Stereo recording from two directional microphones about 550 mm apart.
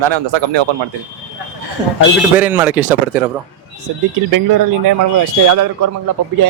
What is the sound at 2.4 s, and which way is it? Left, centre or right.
Speech, centre.